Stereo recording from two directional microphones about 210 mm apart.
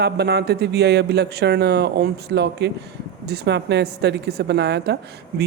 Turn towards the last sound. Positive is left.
turn(degrees=-50)  # may be behind; listen again after turning